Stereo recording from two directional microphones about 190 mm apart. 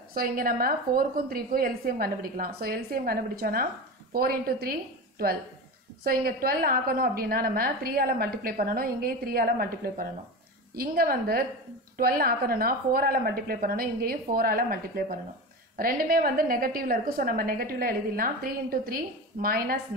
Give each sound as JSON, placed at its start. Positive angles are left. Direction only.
{"t": 0.1, "sound": "a woman's voice", "side_deg": -50}
{"t": 6.0, "sound": "a woman's voice", "side_deg": -50}